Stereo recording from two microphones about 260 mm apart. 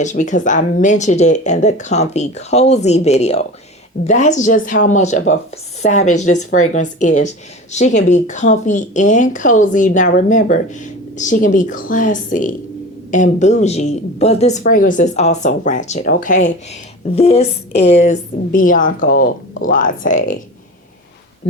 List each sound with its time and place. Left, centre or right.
0.0 s a woman's voice: left